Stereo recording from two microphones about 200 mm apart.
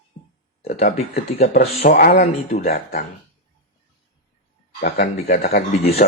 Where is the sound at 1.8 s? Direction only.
50° left (ahead or behind).